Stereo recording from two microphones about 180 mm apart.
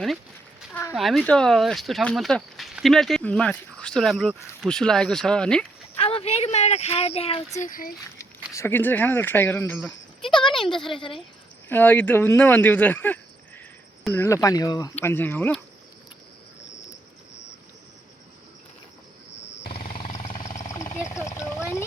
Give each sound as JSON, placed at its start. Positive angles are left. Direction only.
{"t": 0.7, "sound": "speech", "side_deg": 15}
{"t": 0.9, "sound": "speech", "side_deg": 0}
{"t": 6.0, "sound": "a woman's voice", "side_deg": 30}
{"t": 7.6, "sound": "speech", "side_deg": 50}
{"t": 8.5, "sound": "speech", "side_deg": 15}
{"t": 10.9, "sound": "speech", "side_deg": 30}
{"t": 11.7, "sound": "speech", "side_deg": 10}
{"t": 20.4, "sound": "vehicle", "side_deg": 40}
{"t": 21.0, "sound": "a sound", "side_deg": 15}